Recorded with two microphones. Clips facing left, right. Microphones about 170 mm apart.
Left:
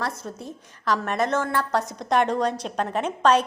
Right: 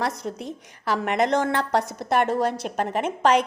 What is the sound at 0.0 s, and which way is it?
A woman's voice, 15° right (ahead or behind).